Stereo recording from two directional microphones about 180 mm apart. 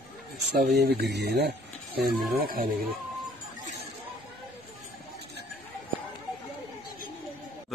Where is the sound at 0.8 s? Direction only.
65° right (ahead or behind).